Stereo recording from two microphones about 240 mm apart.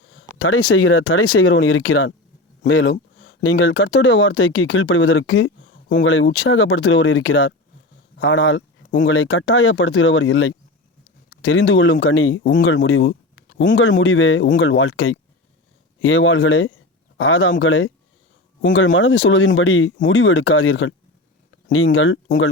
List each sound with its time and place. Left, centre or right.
0.3 s speech: left